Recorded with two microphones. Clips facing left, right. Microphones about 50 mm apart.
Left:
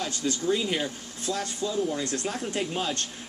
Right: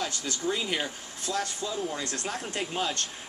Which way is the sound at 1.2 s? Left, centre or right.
Right.